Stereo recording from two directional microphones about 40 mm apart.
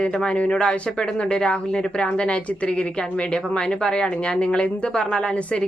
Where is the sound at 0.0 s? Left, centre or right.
Left.